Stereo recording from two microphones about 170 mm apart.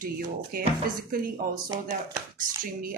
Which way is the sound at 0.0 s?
60° right (ahead or behind).